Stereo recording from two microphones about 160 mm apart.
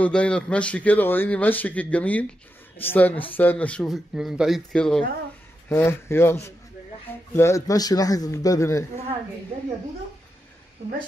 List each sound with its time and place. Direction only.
0.0 s a man's voice: 5° left (ahead or behind)
5.7 s a man's voice: 15° left (ahead or behind)